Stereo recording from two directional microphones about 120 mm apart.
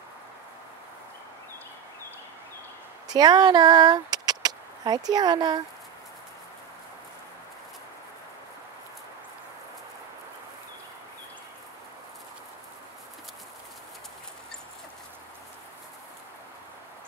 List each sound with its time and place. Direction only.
3.1 s speech: 35° right (ahead or behind)